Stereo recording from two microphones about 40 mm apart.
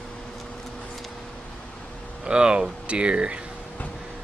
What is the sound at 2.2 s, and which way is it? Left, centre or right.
Speech, right.